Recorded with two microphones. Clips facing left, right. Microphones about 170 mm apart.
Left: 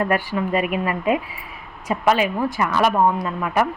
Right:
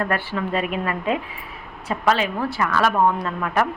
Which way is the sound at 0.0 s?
15° left (ahead or behind).